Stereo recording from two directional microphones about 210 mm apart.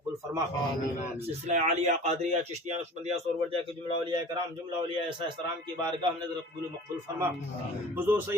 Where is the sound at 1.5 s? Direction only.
30° right (ahead or behind).